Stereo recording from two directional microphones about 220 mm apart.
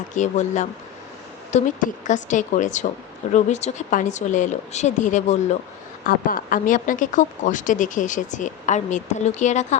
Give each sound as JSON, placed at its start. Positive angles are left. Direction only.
{"t": 0.1, "sound": "speech", "side_deg": 35}